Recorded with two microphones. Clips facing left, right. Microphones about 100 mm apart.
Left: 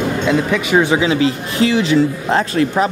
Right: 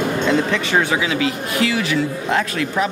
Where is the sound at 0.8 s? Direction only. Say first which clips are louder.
Left 5 dB; 25° left (ahead or behind).